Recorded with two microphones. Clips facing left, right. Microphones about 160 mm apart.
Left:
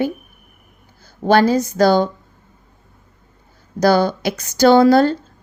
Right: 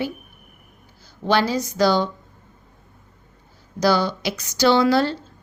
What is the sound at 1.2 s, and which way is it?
Speech, 45° left (ahead or behind).